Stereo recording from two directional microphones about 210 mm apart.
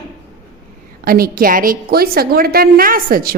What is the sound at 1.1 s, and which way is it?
A woman's voice, 45° right (ahead or behind).